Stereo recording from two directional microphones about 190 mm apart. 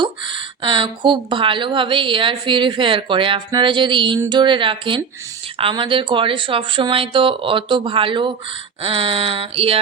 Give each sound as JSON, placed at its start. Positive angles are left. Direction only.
{"t": 0.0, "sound": "speech", "side_deg": -25}